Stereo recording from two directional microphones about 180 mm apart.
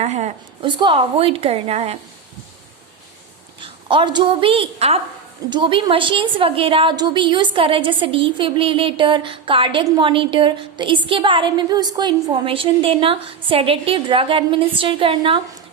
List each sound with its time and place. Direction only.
0.0 s a woman's voice: 40° right (ahead or behind)
0.6 s a woman's voice: 25° right (ahead or behind)
3.6 s a woman's voice: 25° right (ahead or behind)